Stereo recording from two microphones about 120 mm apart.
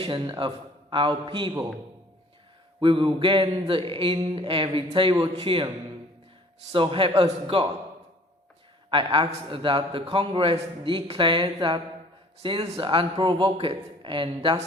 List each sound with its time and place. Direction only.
0.0 s a man's voice: 45° right (ahead or behind)
2.8 s a man's voice: 45° right (ahead or behind)
8.9 s a man's voice: 45° right (ahead or behind)